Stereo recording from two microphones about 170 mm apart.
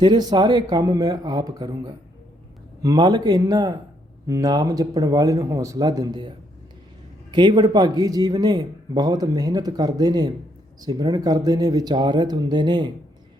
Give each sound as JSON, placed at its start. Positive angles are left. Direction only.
{"t": 0.0, "sound": "a man's voice", "side_deg": -25}